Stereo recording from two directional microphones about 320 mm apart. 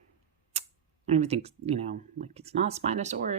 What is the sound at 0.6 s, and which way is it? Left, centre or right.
Camera, centre.